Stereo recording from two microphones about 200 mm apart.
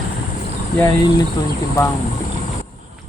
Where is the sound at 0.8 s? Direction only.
20° left (ahead or behind).